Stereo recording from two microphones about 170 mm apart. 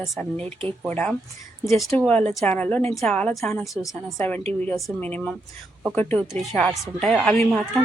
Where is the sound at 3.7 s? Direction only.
20° left (ahead or behind).